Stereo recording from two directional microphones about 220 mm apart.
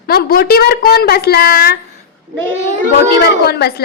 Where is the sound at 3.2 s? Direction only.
45° left (ahead or behind).